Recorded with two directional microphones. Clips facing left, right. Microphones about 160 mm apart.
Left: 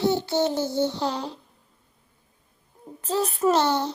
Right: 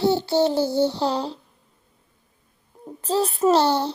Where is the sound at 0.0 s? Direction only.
30° right (ahead or behind).